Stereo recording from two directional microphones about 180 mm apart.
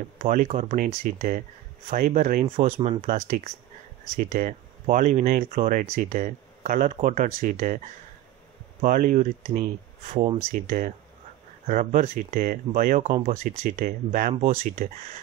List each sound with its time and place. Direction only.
0.2 s speech: 45° right (ahead or behind)
2.5 s speech: 35° right (ahead or behind)
3.0 s speech: 45° right (ahead or behind)
10.1 s speech: 30° right (ahead or behind)
10.5 s speech: 50° right (ahead or behind)